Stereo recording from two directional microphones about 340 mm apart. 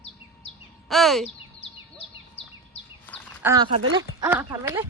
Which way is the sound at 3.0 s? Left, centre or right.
Centre.